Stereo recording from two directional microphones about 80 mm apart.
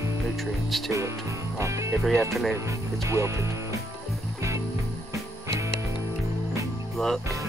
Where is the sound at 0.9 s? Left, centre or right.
Right.